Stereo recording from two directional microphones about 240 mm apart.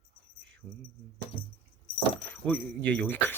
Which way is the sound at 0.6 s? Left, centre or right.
Centre.